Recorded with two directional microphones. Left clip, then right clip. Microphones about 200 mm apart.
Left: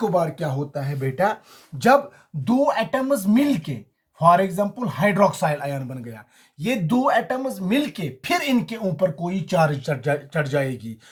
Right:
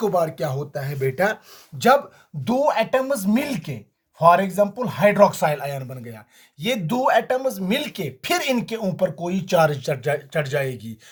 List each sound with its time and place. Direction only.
0.0 s speech: 50° right (ahead or behind)
2.4 s speech: 50° right (ahead or behind)